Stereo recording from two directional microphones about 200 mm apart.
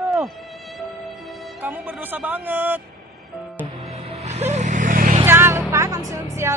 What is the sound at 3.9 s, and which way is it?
Vehicle, 30° right (ahead or behind).